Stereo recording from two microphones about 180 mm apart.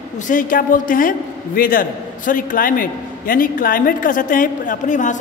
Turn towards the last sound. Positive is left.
turn(degrees=45)  # may be behind; listen again after turning